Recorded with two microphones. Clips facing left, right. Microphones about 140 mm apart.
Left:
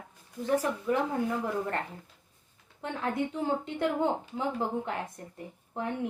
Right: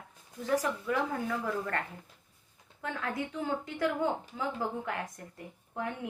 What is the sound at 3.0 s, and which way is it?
A woman's voice, 25° left (ahead or behind).